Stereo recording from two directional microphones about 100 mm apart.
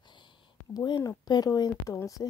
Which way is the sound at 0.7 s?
40° left (ahead or behind).